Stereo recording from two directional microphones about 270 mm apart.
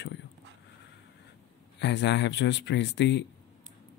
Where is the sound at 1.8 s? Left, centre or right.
Left.